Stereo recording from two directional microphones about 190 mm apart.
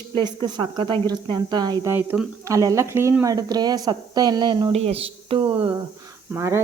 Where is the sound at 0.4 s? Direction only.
25° right (ahead or behind).